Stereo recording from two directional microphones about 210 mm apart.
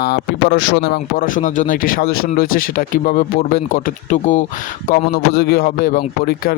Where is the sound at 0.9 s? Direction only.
40° left (ahead or behind).